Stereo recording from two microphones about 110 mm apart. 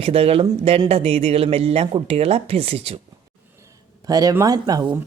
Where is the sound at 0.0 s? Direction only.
60° right (ahead or behind).